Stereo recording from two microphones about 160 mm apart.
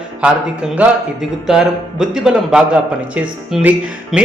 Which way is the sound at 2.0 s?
5° right (ahead or behind).